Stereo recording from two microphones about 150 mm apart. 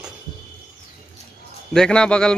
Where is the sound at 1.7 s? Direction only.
5° left (ahead or behind).